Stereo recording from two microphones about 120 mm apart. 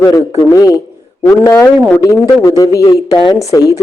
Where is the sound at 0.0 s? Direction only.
30° left (ahead or behind).